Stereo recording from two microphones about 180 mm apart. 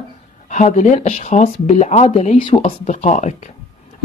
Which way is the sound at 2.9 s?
40° left (ahead or behind).